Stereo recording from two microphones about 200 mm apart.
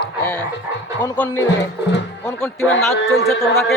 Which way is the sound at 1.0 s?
10° left (ahead or behind).